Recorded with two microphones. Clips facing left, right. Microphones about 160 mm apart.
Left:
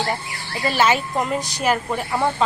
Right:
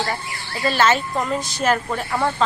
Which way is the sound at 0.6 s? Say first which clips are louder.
Right 1 dB; 10° left (ahead or behind).